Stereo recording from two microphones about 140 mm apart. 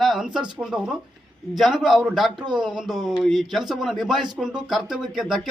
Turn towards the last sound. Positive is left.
turn(degrees=0)  # may be behind; listen again after turning